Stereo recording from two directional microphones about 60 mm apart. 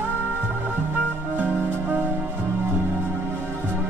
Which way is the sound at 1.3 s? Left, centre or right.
Right.